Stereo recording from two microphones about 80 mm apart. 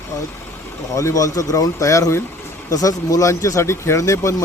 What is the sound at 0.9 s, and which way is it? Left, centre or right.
Speech, left.